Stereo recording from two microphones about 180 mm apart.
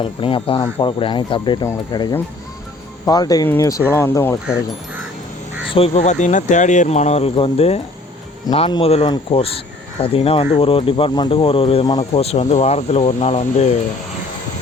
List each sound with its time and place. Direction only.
0.0 s speech: 30° left (ahead or behind)
5.7 s speech: 30° left (ahead or behind)